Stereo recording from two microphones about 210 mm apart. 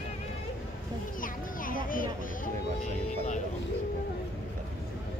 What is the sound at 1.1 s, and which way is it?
Speech, 40° left (ahead or behind).